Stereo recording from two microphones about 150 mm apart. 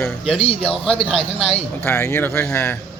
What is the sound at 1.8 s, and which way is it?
Speech, 15° left (ahead or behind).